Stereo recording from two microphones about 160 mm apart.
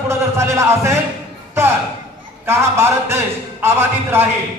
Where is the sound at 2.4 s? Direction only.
15° right (ahead or behind).